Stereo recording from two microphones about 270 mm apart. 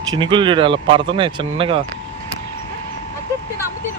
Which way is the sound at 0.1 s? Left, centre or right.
Centre.